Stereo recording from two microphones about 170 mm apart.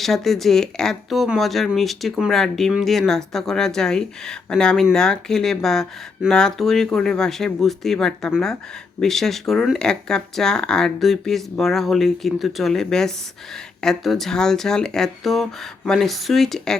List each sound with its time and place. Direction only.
0.0 s speech: centre (ahead or behind)